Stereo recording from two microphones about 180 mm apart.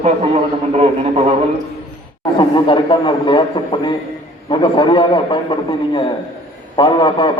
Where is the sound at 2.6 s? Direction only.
25° left (ahead or behind).